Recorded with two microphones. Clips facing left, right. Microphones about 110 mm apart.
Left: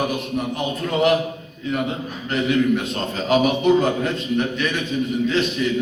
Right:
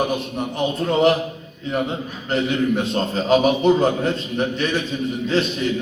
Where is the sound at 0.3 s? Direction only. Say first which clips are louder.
Right 1 dB; 30° right (ahead or behind).